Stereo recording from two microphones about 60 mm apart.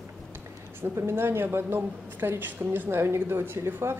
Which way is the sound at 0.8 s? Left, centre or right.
Right.